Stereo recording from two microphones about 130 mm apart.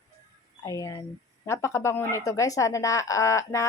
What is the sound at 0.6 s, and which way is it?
A woman's voice, 25° left (ahead or behind).